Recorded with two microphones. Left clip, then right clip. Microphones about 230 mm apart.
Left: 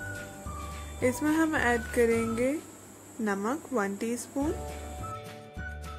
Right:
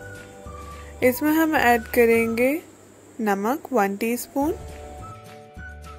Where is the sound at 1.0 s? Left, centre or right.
Right.